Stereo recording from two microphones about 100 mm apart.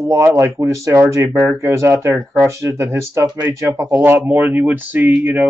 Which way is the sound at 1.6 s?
25° right (ahead or behind).